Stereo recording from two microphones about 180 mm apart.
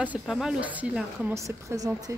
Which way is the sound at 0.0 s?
5° right (ahead or behind).